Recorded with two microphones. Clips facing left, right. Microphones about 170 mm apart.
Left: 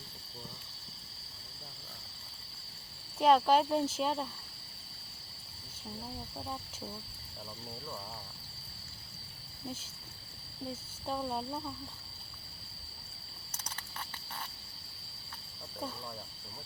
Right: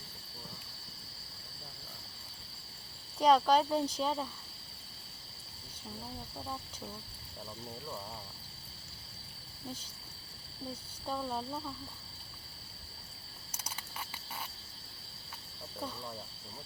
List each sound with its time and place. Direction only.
3.2 s speech: 5° left (ahead or behind)
11.0 s speech: 10° left (ahead or behind)